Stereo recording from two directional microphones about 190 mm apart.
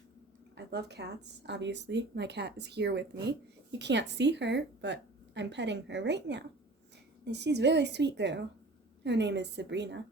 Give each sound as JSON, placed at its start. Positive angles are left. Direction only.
{"t": 0.5, "sound": "speech", "side_deg": -60}